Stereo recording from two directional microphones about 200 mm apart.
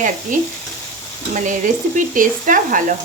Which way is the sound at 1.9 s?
40° right (ahead or behind).